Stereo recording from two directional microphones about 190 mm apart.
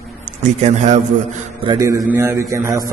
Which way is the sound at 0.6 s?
35° right (ahead or behind).